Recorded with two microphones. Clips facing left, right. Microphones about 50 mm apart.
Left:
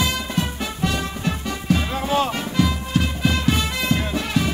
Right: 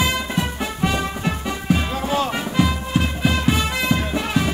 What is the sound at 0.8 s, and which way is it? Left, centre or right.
Music, right.